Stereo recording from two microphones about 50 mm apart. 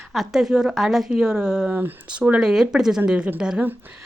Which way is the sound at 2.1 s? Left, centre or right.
Right.